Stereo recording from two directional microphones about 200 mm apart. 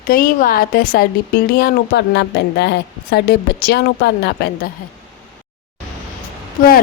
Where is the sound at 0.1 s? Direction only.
45° left (ahead or behind).